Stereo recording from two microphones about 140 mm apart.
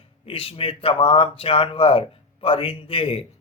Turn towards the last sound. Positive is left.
turn(degrees=40)  # may be behind; listen again after turning